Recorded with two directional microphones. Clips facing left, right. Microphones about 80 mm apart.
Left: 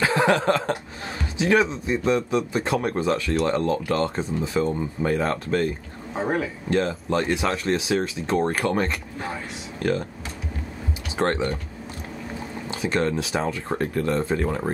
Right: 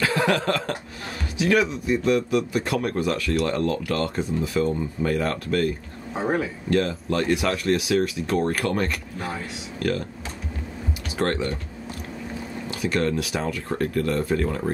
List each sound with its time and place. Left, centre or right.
0.0 s speech: left
6.1 s speech: centre
6.7 s speech: left
11.1 s speech: left
12.6 s speech: left